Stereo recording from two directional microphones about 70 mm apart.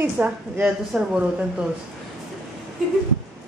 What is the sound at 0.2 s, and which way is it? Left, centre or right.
Speech, centre.